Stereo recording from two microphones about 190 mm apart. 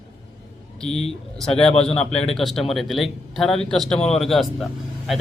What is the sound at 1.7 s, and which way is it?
Speech, 30° left (ahead or behind).